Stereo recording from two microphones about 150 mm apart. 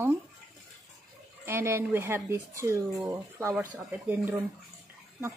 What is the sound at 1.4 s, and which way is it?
Speech, 15° right (ahead or behind).